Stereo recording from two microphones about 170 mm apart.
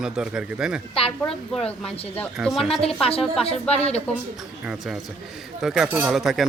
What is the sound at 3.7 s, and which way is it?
Speech, 40° left (ahead or behind).